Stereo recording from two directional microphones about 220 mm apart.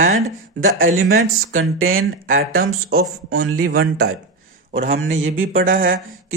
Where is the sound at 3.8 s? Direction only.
45° right (ahead or behind).